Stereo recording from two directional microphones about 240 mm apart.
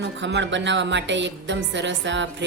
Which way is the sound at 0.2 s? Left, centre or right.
Right.